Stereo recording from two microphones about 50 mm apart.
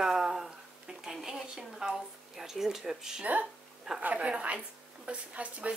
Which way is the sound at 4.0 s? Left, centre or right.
Right.